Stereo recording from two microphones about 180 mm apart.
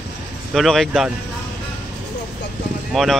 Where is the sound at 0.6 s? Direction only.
Centre (ahead or behind).